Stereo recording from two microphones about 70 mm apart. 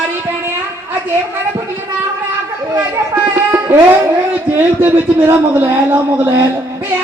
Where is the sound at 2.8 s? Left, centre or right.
Right.